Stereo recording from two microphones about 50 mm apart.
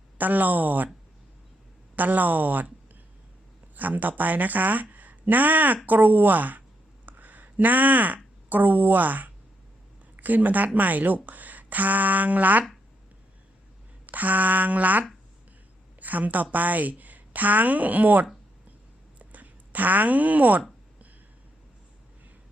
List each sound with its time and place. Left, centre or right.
0.2 s speech: right
2.0 s a woman's voice: right
14.1 s a woman's voice: right
19.2 s a sound: right